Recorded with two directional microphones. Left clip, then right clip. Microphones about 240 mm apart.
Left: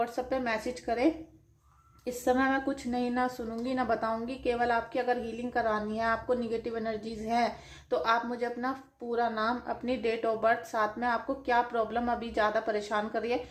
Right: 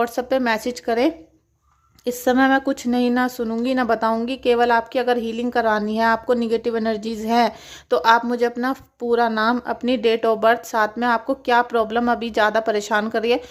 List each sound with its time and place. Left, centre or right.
0.0 s speech: right